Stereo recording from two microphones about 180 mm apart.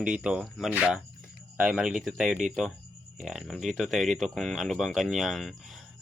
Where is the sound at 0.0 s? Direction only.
5° right (ahead or behind).